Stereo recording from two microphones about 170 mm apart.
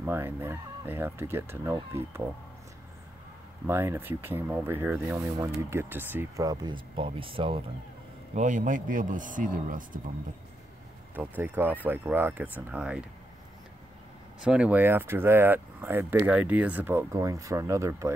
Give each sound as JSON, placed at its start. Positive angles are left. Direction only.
{"t": 0.0, "sound": "speech", "side_deg": -15}
{"t": 3.6, "sound": "speech", "side_deg": -15}
{"t": 6.4, "sound": "speech", "side_deg": -25}
{"t": 8.4, "sound": "speech", "side_deg": -45}
{"t": 11.1, "sound": "speech", "side_deg": -10}
{"t": 14.4, "sound": "speech", "side_deg": -5}